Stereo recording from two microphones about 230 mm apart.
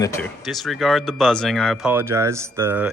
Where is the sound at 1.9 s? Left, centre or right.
Centre.